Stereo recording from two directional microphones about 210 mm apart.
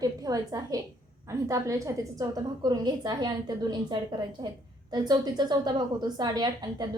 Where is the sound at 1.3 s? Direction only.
15° right (ahead or behind).